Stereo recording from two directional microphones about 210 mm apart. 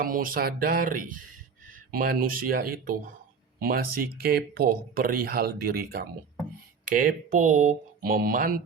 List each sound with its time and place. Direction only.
0.0 s speech: 40° right (ahead or behind)